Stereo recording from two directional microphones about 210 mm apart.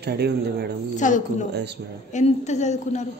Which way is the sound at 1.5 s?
55° right (ahead or behind).